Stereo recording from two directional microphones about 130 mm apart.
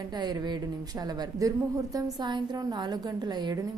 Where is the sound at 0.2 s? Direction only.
30° right (ahead or behind).